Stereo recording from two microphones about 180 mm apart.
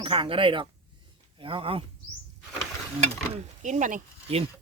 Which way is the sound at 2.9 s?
40° right (ahead or behind).